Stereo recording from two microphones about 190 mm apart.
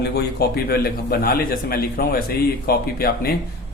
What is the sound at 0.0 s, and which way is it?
A man's voice, 55° left (ahead or behind).